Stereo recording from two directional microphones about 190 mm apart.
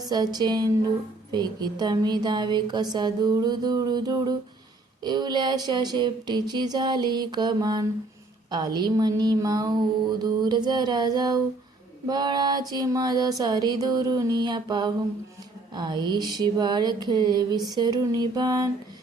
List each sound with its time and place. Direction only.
0.1 s speech: 20° right (ahead or behind)